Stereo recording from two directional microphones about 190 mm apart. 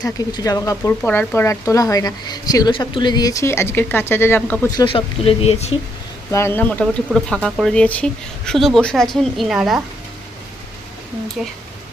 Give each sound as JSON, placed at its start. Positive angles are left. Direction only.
{"t": 0.0, "sound": "speech", "side_deg": 20}
{"t": 4.9, "sound": "speech", "side_deg": 30}
{"t": 6.3, "sound": "speech", "side_deg": 10}
{"t": 11.4, "sound": "speech", "side_deg": -5}